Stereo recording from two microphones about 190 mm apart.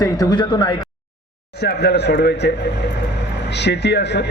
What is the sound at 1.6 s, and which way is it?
Speech, 60° left (ahead or behind).